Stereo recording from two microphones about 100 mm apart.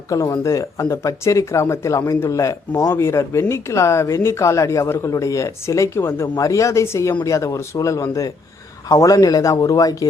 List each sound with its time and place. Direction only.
0.1 s speech: 35° left (ahead or behind)